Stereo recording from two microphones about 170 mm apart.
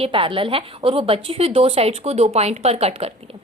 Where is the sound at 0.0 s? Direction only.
30° right (ahead or behind).